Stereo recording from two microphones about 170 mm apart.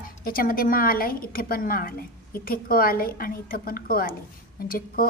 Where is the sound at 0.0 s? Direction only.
55° left (ahead or behind).